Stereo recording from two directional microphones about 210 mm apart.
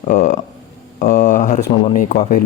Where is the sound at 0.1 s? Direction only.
35° left (ahead or behind).